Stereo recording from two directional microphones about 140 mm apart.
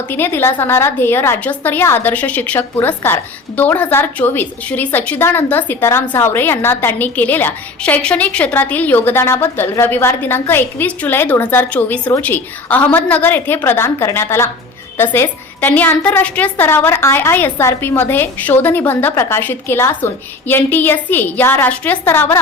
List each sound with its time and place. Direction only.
0.1 s a woman's voice: 15° left (ahead or behind)